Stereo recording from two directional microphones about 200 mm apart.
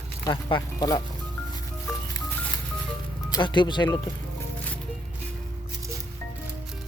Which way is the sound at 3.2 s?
20° left (ahead or behind).